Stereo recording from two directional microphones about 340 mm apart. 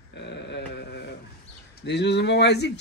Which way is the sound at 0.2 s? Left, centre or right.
Left.